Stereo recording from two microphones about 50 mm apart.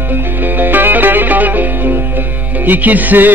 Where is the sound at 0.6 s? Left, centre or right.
Right.